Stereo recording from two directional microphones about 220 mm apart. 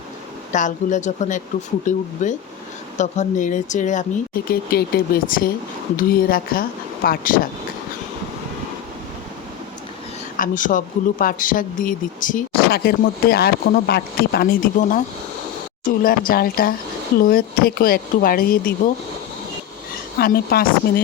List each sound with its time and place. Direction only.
0.5 s speech: 35° left (ahead or behind)
10.3 s speech: 35° left (ahead or behind)
20.1 s speech: 45° left (ahead or behind)